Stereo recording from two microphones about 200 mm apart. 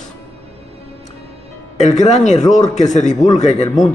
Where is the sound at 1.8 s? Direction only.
35° left (ahead or behind).